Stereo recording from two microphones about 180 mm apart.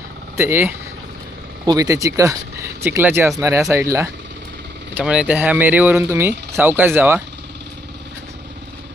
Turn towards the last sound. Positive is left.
turn(degrees=-15)  # may be behind; listen again after turning